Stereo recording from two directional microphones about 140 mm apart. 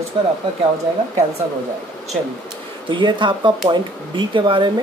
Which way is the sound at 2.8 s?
35° right (ahead or behind).